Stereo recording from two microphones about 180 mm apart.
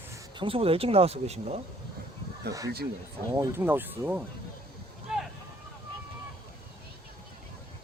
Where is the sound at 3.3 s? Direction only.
15° right (ahead or behind).